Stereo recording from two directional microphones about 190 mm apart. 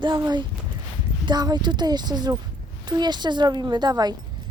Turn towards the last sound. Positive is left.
turn(degrees=-20)  # may be behind; listen again after turning